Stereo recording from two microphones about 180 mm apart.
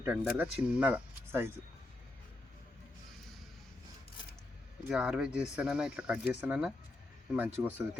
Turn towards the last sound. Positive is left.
turn(degrees=-10)  # may be behind; listen again after turning